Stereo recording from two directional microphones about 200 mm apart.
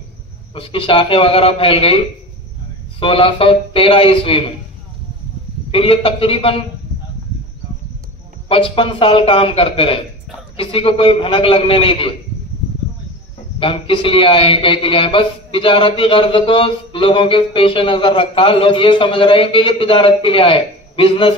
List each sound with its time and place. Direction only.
0.6 s a man's voice: 25° left (ahead or behind)
3.0 s a man's voice: 25° left (ahead or behind)
5.7 s a man's voice: 25° left (ahead or behind)
8.5 s a man's voice: 25° left (ahead or behind)
13.6 s a man's voice: 25° left (ahead or behind)